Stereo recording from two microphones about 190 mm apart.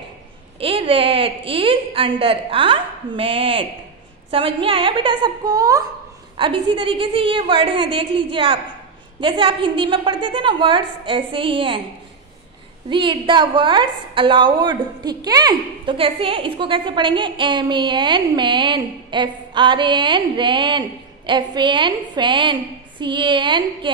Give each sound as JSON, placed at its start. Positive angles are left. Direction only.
{"t": 0.6, "sound": "a woman's voice", "side_deg": -30}
{"t": 12.9, "sound": "a woman's voice", "side_deg": -25}